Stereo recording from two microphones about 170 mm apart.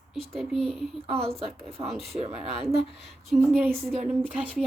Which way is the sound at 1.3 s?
35° right (ahead or behind).